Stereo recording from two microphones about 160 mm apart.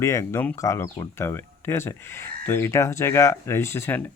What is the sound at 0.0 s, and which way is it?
Speech, 20° left (ahead or behind).